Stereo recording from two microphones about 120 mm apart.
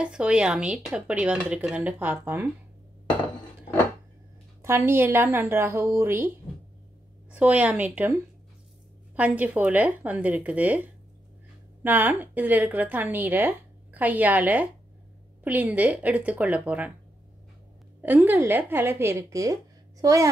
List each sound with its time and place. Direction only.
0.0 s a woman's voice: 5° right (ahead or behind)
4.6 s a woman's voice: 20° right (ahead or behind)
9.1 s a woman's voice: 10° right (ahead or behind)
18.0 s a woman's voice: 15° right (ahead or behind)